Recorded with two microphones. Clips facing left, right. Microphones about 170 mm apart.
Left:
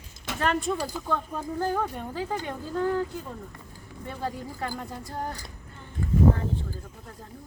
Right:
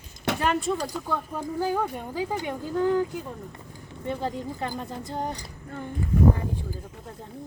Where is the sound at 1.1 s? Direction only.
10° right (ahead or behind).